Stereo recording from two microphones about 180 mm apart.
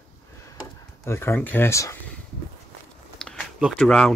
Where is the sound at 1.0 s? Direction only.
15° left (ahead or behind).